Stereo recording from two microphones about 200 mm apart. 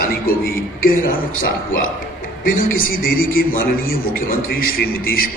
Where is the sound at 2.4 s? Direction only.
45° left (ahead or behind).